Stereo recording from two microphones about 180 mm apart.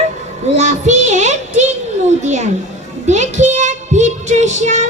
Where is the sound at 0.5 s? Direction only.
40° right (ahead or behind).